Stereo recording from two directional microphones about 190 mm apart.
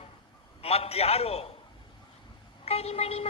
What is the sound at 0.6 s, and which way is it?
Speech, 30° left (ahead or behind).